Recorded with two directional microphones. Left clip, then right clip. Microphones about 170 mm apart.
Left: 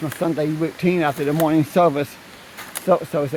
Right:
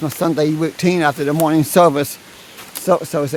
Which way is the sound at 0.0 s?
50° right (ahead or behind).